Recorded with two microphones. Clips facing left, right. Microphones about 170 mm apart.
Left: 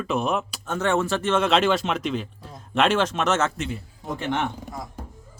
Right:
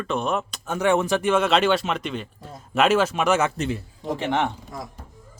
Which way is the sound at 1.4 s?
Centre (ahead or behind).